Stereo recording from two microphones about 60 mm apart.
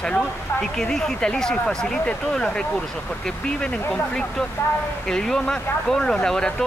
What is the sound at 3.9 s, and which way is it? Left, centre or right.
Speech, centre.